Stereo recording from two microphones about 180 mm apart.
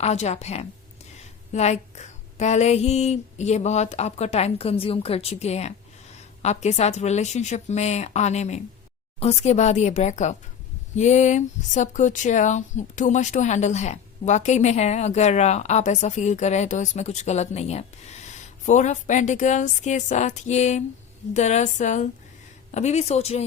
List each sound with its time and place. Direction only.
0.0 s speech: 40° left (ahead or behind)